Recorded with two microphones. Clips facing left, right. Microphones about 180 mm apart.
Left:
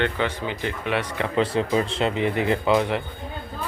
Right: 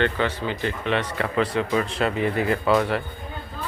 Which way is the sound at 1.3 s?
25° left (ahead or behind).